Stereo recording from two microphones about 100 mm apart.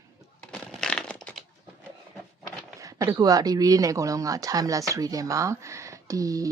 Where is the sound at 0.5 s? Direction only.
5° left (ahead or behind).